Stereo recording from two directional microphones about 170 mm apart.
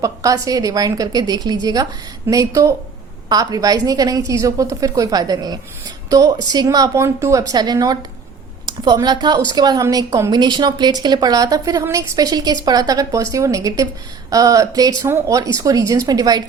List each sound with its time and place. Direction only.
0.0 s a woman's voice: 20° right (ahead or behind)